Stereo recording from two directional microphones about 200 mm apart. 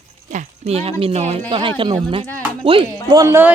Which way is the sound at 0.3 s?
35° right (ahead or behind).